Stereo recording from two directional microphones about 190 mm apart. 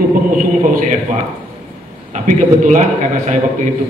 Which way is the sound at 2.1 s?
40° right (ahead or behind).